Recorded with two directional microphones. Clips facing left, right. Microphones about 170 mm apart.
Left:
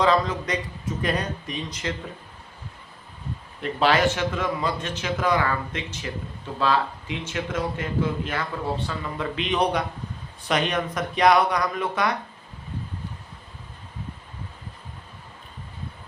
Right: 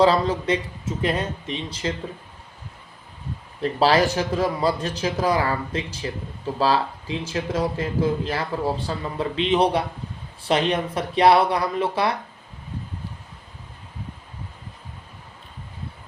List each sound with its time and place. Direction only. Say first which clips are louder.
0.0 s a man's voice: right 3 dB; 30° right (ahead or behind)
3.6 s speech: right 2 dB; 35° right (ahead or behind)